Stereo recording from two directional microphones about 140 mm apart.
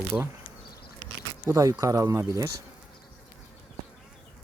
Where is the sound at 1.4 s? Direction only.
25° right (ahead or behind).